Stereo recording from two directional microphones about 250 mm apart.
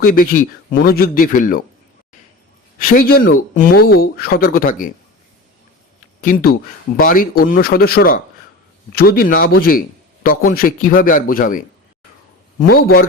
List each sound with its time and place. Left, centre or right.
0.0 s speech: left
2.7 s speech: left
6.2 s speech: left